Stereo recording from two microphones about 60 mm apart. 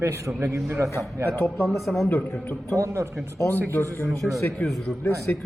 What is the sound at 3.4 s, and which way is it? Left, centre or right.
Speech, left.